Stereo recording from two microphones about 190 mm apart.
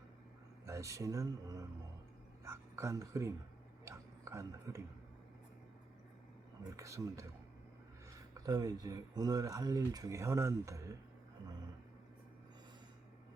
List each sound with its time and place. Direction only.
0.6 s speech: 15° right (ahead or behind)
2.4 s a sound: 15° right (ahead or behind)
6.7 s speech: 15° right (ahead or behind)
8.4 s speech: 20° right (ahead or behind)